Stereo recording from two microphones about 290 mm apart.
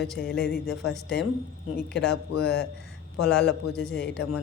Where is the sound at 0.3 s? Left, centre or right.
Left.